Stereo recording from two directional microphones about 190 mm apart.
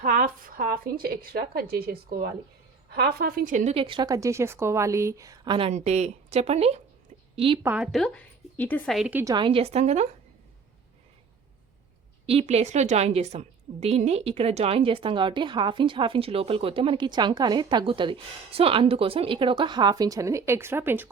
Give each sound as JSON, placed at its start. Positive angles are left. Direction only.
{"t": 0.0, "sound": "a woman's voice", "side_deg": -45}
{"t": 7.6, "sound": "speech", "side_deg": -5}
{"t": 9.0, "sound": "a woman's voice", "side_deg": -10}
{"t": 9.3, "sound": "a woman's voice", "side_deg": -25}
{"t": 12.2, "sound": "a woman's voice", "side_deg": -30}